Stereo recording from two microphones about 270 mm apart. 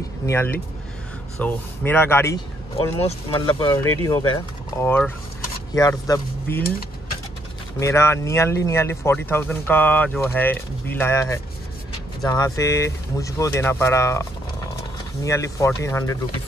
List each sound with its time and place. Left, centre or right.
0.3 s speech: centre
3.0 s speech: left
7.8 s speech: centre
15.2 s speech: centre